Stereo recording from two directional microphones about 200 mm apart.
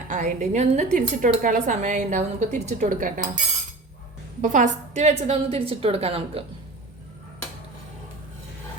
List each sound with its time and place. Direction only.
0.1 s speech: 35° right (ahead or behind)
4.4 s a woman's voice: 40° right (ahead or behind)